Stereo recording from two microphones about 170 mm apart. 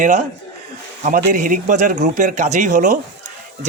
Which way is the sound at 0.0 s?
45° right (ahead or behind).